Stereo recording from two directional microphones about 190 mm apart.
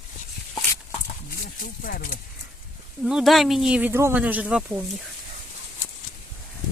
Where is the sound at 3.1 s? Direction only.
Centre (ahead or behind).